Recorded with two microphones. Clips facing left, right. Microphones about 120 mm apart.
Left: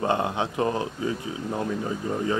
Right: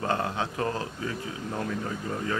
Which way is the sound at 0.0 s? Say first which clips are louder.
Left 4 dB; 20° left (ahead or behind).